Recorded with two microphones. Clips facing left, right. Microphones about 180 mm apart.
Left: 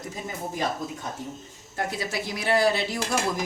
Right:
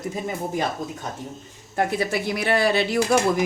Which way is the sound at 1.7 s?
60° right (ahead or behind).